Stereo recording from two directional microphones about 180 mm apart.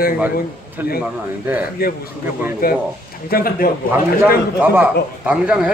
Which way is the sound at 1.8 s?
55° left (ahead or behind).